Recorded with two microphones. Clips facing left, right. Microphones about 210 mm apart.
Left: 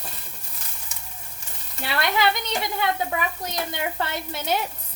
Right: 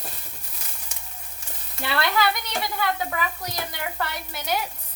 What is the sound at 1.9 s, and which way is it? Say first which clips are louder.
Speech: left 1 dB; 20° left (ahead or behind).